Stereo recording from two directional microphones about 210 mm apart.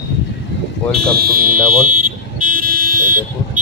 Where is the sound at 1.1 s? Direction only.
45° right (ahead or behind).